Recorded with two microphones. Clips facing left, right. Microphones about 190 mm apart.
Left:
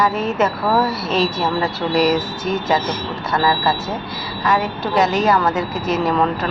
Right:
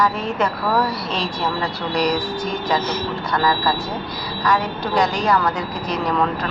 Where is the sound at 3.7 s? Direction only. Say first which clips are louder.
Left 2 dB; 25° left (ahead or behind).